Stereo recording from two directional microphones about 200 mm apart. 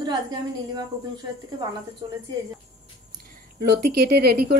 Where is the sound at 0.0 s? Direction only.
20° right (ahead or behind).